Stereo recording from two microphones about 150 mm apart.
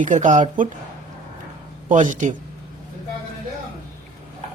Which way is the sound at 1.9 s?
55° right (ahead or behind).